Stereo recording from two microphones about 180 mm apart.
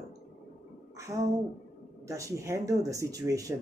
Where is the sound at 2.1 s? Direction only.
15° right (ahead or behind).